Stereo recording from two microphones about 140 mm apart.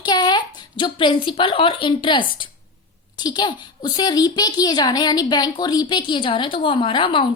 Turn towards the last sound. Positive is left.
turn(degrees=35)  # may be behind; listen again after turning